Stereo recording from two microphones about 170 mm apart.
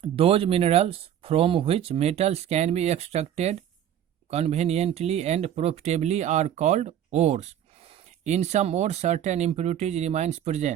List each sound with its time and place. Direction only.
0.0 s speech: 35° right (ahead or behind)